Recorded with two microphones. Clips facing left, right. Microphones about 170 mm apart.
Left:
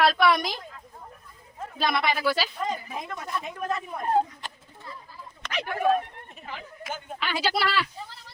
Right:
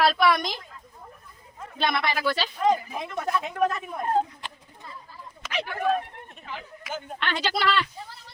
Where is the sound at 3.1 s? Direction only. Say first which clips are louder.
Right 10 dB; 70° right (ahead or behind).